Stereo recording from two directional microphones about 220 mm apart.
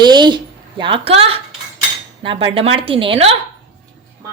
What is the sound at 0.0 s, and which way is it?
A woman's voice, 20° right (ahead or behind).